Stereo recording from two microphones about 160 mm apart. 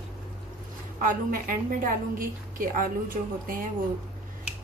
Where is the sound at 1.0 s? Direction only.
60° right (ahead or behind).